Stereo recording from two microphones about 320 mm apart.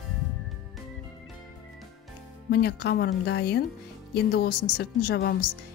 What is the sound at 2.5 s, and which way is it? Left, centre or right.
Speech, left.